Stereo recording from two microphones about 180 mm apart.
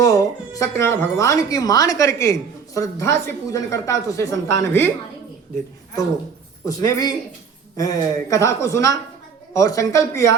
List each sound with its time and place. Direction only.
0.0 s speech: 20° left (ahead or behind)
6.7 s speech: 20° left (ahead or behind)